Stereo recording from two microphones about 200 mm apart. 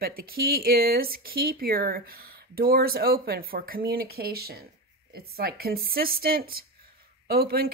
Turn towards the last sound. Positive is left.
turn(degrees=-50)  # may be behind; listen again after turning